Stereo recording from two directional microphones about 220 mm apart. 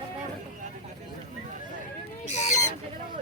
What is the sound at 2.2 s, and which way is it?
Chicken, 30° left (ahead or behind).